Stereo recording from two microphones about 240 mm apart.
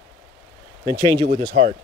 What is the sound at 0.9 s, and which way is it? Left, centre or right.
Speech, centre.